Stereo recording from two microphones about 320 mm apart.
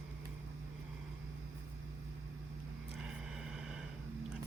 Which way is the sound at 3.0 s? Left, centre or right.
Centre.